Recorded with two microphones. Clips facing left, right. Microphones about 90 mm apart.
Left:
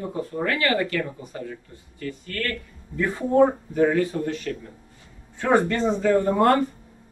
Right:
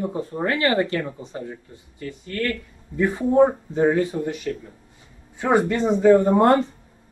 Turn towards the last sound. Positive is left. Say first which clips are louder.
# right 2 dB
turn(degrees=-20)  # may be behind; listen again after turning